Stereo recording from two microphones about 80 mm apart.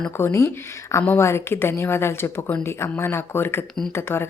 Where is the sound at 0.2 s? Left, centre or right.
Left.